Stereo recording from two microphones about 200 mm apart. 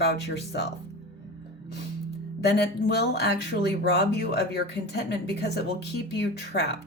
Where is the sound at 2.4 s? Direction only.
55° left (ahead or behind).